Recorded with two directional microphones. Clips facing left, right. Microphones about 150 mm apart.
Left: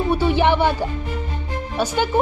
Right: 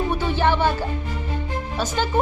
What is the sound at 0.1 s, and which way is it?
Music, 15° left (ahead or behind).